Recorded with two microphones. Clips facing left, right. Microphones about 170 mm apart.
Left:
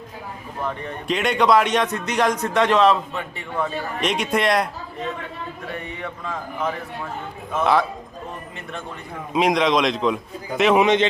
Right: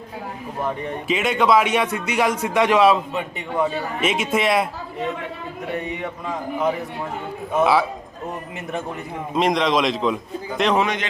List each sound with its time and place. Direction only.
1.0 s a man's voice: 5° right (ahead or behind)
4.0 s a man's voice: 5° right (ahead or behind)
5.8 s a man's voice: 20° right (ahead or behind)
7.6 s a man's voice: 5° right (ahead or behind)
9.3 s a man's voice: centre (ahead or behind)
10.8 s speech: 25° left (ahead or behind)